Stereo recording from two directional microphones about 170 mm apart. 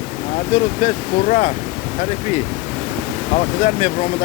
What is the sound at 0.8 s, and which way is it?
Speech, 45° left (ahead or behind).